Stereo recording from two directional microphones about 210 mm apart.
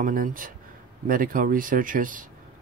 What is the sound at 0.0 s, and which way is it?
Speech, 40° right (ahead or behind).